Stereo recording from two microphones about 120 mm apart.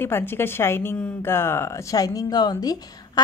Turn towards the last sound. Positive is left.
turn(degrees=35)  # may be behind; listen again after turning